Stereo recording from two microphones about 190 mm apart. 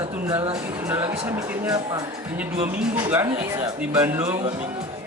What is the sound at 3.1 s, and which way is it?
Speech, 10° right (ahead or behind).